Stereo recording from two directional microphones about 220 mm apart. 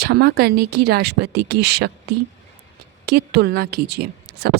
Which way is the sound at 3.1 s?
50° right (ahead or behind).